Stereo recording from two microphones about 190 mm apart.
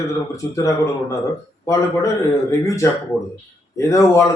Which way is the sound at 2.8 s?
15° left (ahead or behind).